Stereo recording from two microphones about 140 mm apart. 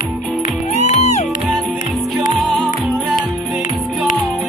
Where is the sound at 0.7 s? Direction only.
55° left (ahead or behind).